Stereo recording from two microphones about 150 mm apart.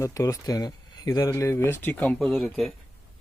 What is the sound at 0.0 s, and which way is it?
Speech, 20° left (ahead or behind).